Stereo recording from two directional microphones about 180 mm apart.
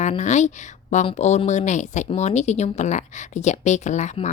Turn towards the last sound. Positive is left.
turn(degrees=40)  # may be behind; listen again after turning